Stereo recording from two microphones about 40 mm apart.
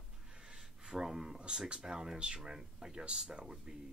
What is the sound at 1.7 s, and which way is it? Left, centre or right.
Speech, centre.